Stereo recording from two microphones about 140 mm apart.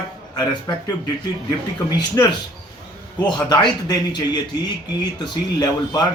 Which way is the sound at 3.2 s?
30° left (ahead or behind).